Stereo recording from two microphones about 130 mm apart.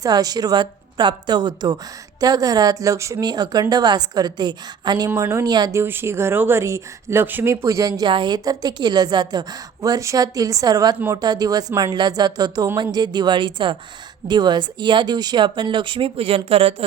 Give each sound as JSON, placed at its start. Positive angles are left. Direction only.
{"t": 0.0, "sound": "a woman's voice", "side_deg": -30}
{"t": 5.0, "sound": "speech", "side_deg": -20}
{"t": 5.8, "sound": "a woman's voice", "side_deg": -20}